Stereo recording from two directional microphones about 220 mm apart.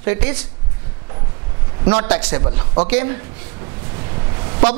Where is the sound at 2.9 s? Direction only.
20° right (ahead or behind).